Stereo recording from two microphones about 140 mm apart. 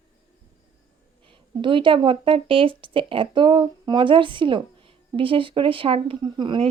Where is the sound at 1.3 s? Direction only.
35° right (ahead or behind).